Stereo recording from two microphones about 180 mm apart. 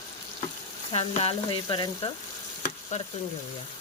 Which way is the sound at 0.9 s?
35° left (ahead or behind).